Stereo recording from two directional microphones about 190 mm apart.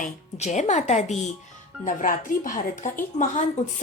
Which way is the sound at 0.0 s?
35° left (ahead or behind).